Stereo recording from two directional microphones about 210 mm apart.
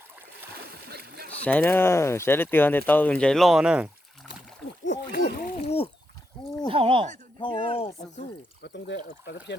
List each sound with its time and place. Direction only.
0.5 s a sound: 50° right (ahead or behind)
1.4 s speech: 5° left (ahead or behind)
4.9 s splash: 50° left (ahead or behind)
5.6 s a sound: 30° left (ahead or behind)
6.7 s speech: 25° right (ahead or behind)
7.3 s speech: 25° left (ahead or behind)
8.6 s speech: 55° left (ahead or behind)